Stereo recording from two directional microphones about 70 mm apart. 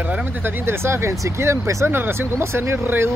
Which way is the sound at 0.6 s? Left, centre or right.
Right.